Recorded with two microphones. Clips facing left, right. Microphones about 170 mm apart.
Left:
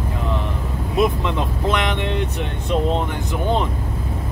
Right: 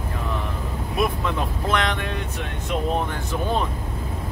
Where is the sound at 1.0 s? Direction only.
20° left (ahead or behind).